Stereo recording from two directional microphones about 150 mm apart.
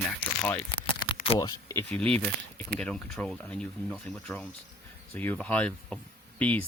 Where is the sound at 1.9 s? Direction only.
10° left (ahead or behind).